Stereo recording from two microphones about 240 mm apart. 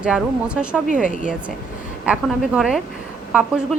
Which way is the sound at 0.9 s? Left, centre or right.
Right.